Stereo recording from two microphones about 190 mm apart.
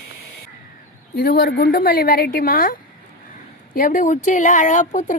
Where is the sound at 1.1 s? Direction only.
55° left (ahead or behind).